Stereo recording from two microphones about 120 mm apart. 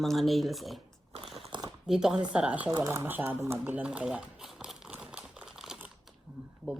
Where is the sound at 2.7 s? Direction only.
25° right (ahead or behind); by 4.2 s 10° right (ahead or behind).